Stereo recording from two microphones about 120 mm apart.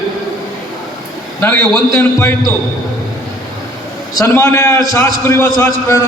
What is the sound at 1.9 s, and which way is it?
Speech, 25° left (ahead or behind).